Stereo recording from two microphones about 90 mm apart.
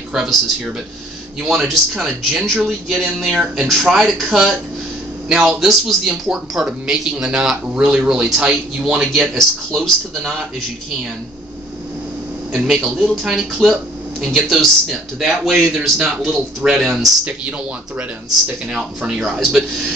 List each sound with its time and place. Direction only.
0.1 s speech: 5° right (ahead or behind)
1.4 s a man's voice: centre (ahead or behind)
13.0 s a man's voice: 5° right (ahead or behind)
17.2 s speech: 15° right (ahead or behind)